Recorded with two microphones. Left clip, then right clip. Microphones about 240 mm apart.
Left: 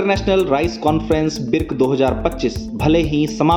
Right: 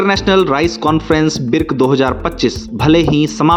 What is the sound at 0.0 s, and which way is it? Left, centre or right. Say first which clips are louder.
Speech: right 4 dB; right.